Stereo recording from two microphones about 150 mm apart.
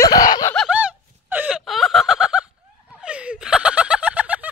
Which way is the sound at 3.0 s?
10° right (ahead or behind).